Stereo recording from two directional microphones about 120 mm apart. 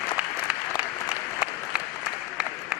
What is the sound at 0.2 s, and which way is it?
Applause, 15° right (ahead or behind).